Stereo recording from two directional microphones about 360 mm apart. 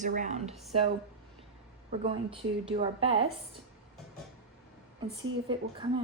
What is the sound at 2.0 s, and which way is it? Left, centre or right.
A woman's voice, centre.